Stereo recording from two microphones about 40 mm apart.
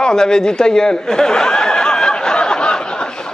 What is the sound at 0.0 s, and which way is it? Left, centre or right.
Chuckle, centre.